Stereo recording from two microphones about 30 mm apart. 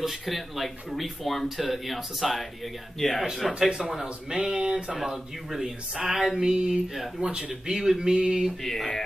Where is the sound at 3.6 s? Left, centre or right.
Right.